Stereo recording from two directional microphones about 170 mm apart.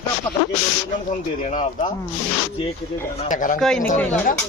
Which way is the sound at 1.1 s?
45° left (ahead or behind).